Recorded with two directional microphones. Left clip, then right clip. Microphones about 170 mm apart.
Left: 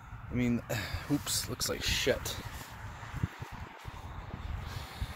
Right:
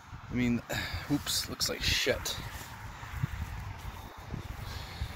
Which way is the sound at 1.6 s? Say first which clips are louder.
Right 3 dB; 15° left (ahead or behind).